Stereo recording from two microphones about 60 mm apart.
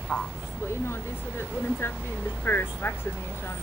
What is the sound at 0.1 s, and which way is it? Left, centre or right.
Speech, centre.